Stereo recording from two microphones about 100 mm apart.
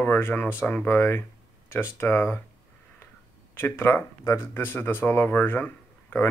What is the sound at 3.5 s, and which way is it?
Speech, 20° left (ahead or behind).